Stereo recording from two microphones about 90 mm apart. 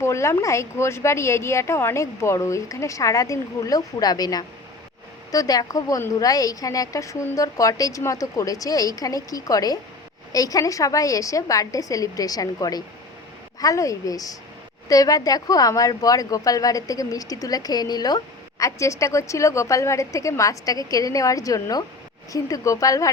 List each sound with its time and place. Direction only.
0.0 s a woman's voice: 35° left (ahead or behind)
18.6 s a woman's voice: 35° left (ahead or behind)